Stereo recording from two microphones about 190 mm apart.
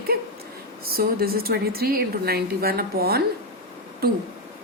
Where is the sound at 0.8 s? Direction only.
55° right (ahead or behind).